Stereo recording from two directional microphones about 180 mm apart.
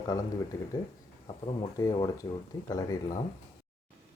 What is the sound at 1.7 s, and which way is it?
Speech, 20° left (ahead or behind).